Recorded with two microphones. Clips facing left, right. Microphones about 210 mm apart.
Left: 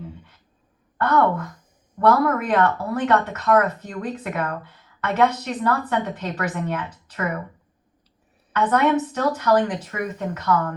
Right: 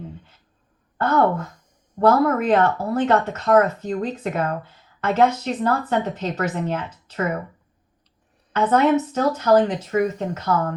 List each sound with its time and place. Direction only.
0.9 s speech: 25° right (ahead or behind)
8.5 s speech: 25° right (ahead or behind)